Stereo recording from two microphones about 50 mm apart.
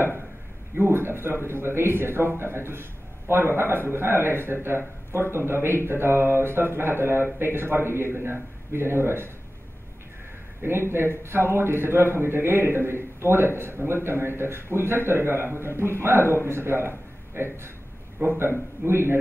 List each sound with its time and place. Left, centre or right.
0.7 s a man's voice: right
10.6 s a man's voice: right
18.9 s a man's voice: right